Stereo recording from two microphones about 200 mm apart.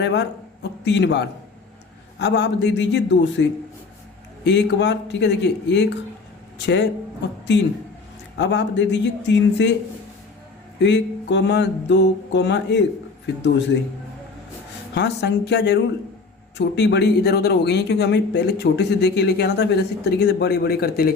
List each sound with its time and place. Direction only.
0.0 s speech: 60° left (ahead or behind)
8.4 s speech: 65° left (ahead or behind)
10.8 s speech: 60° left (ahead or behind)
14.9 s speech: 60° left (ahead or behind)